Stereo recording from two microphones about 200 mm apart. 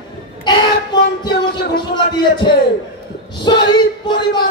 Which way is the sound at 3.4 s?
20° left (ahead or behind).